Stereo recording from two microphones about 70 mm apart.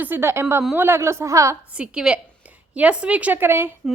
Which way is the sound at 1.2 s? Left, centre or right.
Right.